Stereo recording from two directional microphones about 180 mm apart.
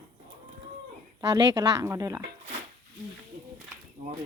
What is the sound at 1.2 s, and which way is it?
Speech, 20° right (ahead or behind).